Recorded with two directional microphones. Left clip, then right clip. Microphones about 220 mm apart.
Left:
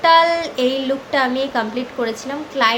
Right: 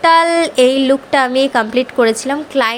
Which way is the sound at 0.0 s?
40° right (ahead or behind).